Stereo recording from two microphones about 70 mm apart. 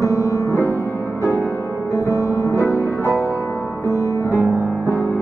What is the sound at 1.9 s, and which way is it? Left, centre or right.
Music, left.